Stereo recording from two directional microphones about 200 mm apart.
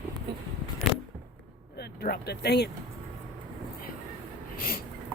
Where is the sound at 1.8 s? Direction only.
50° left (ahead or behind).